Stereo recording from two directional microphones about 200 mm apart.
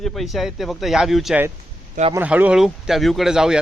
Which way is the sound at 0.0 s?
Centre (ahead or behind).